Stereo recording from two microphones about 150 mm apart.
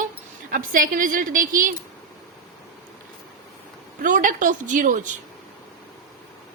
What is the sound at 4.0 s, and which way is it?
A woman's voice, 60° right (ahead or behind).